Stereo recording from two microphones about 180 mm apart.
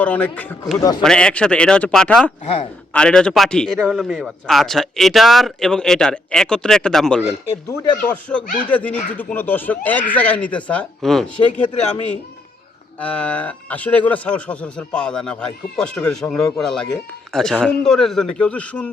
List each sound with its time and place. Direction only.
0.0 s speech: 10° left (ahead or behind)
0.8 s a man's voice: 20° left (ahead or behind)
1.0 s a man's voice: 5° left (ahead or behind)
2.4 s a man's voice: 35° left (ahead or behind)
2.9 s a man's voice: 5° left (ahead or behind)
7.7 s speech: 15° left (ahead or behind)
13.0 s speech: 10° left (ahead or behind)